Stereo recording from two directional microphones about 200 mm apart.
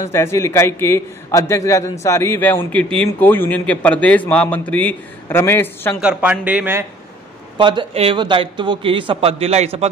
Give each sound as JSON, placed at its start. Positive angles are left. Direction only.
{"t": 0.0, "sound": "a man's voice", "side_deg": 15}
{"t": 5.9, "sound": "speech", "side_deg": -5}
{"t": 7.5, "sound": "a man's voice", "side_deg": -25}